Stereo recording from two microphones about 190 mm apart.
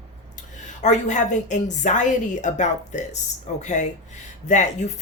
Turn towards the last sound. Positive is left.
turn(degrees=40)  # may be behind; listen again after turning